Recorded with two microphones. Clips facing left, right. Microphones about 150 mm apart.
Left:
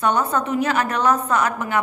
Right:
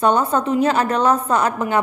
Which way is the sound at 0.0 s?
30° right (ahead or behind).